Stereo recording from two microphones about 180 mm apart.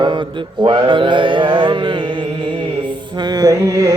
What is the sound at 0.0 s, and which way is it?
Mantra, 25° right (ahead or behind).